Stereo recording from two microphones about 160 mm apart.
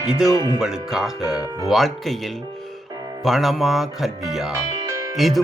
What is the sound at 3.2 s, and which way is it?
Speech, centre (ahead or behind).